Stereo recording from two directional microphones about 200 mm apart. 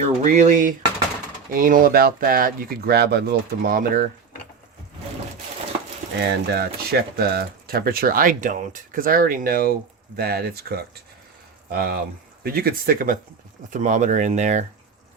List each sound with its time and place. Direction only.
0.0 s speech: 35° right (ahead or behind)
6.1 s speech: 55° right (ahead or behind); by 14.6 s 35° right (ahead or behind)